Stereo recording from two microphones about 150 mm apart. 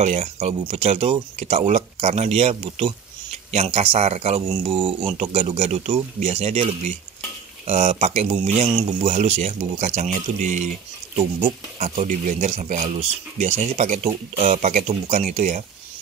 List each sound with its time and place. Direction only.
0.0 s speech: 45° right (ahead or behind)
8.7 s speech: 30° right (ahead or behind)
9.1 s speech: 45° right (ahead or behind)
11.8 s speech: 50° right (ahead or behind)